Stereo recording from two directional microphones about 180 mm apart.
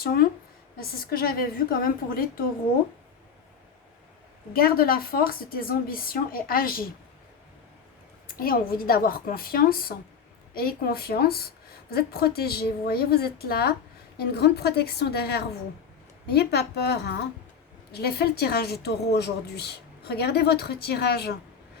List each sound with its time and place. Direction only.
0.0 s speech: 60° left (ahead or behind)
4.5 s speech: 55° left (ahead or behind)
8.4 s a woman's voice: 55° left (ahead or behind)